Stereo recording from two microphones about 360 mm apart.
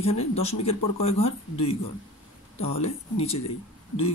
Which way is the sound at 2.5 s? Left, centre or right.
Left.